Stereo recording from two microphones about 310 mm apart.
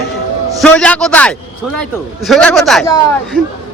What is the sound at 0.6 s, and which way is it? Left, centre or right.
A man's voice, centre.